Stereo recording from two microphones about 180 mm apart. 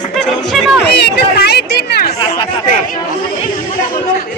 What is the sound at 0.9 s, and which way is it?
Chatter, 65° left (ahead or behind).